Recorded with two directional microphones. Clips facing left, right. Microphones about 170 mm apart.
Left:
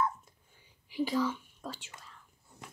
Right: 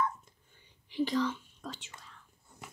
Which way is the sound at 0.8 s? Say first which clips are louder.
Even; 10° left (ahead or behind).